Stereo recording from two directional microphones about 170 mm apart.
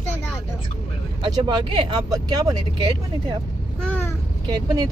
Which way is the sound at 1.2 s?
25° right (ahead or behind).